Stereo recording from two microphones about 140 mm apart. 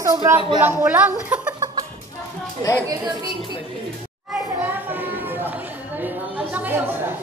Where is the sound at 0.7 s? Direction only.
10° right (ahead or behind).